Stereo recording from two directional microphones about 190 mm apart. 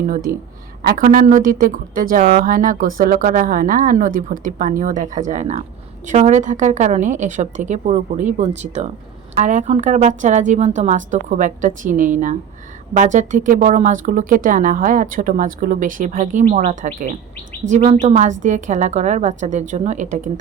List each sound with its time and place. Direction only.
0.8 s a woman's voice: 45° right (ahead or behind)
17.6 s speech: 70° right (ahead or behind)
18.0 s a woman's voice: 40° right (ahead or behind)